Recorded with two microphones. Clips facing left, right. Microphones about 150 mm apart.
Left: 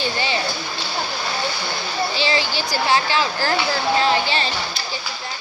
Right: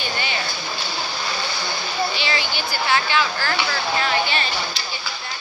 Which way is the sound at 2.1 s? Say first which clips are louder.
Left 4 dB; 30° left (ahead or behind).